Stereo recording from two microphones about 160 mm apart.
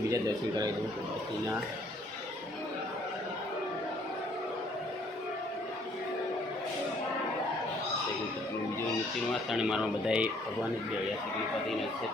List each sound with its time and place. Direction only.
0.1 s a man's voice: 25° right (ahead or behind)
9.5 s speech: 5° right (ahead or behind)